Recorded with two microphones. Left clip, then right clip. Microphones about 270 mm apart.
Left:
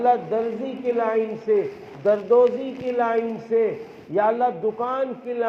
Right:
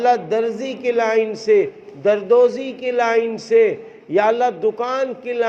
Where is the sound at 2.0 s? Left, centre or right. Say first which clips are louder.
Right 3 dB; right.